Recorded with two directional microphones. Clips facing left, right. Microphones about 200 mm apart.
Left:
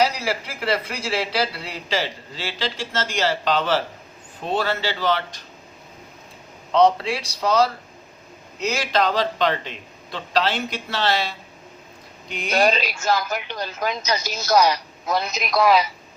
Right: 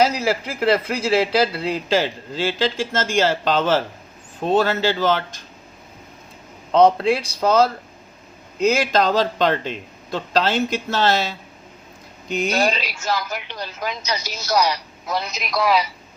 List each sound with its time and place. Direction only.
0.0 s speech: 50° right (ahead or behind)
6.7 s speech: 50° right (ahead or behind)
12.5 s speech: 50° left (ahead or behind)